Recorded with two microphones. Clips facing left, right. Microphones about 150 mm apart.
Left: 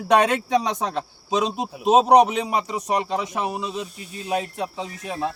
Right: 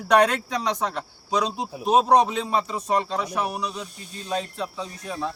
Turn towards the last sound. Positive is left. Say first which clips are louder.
# left 3 dB
turn(degrees=20)  # may be behind; listen again after turning